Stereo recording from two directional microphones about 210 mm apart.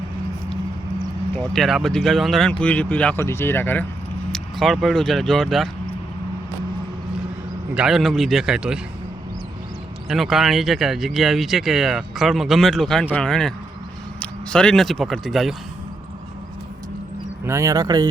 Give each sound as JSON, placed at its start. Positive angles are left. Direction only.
{"t": 1.5, "sound": "speech", "side_deg": 0}
{"t": 7.8, "sound": "speech", "side_deg": 0}
{"t": 10.1, "sound": "speech", "side_deg": 0}
{"t": 17.4, "sound": "speech", "side_deg": -15}